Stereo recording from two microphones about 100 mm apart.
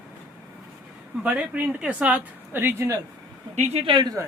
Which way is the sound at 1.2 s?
15° right (ahead or behind).